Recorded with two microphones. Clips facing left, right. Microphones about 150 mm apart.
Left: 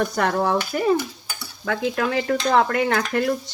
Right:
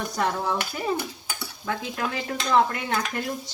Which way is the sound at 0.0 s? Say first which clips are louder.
Left 5 dB; 70° left (ahead or behind).